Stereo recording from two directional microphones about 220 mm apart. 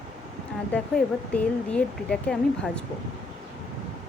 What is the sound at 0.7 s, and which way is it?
Speech, 5° left (ahead or behind).